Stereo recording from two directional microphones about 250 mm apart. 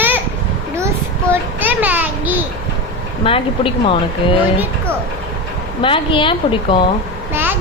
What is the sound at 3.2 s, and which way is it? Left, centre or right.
Speech, left.